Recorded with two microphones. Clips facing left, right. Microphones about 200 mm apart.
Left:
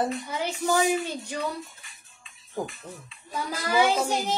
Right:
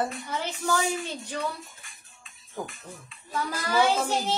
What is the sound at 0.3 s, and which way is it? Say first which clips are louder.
A woman's voice: left 2 dB; 15° left (ahead or behind).